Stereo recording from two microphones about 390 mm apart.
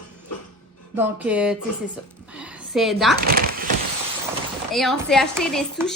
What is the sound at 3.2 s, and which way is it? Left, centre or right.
Speech, right.